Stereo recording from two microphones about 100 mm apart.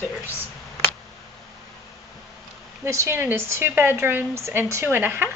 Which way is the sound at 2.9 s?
30° right (ahead or behind).